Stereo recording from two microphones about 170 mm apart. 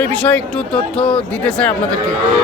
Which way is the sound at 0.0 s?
5° left (ahead or behind).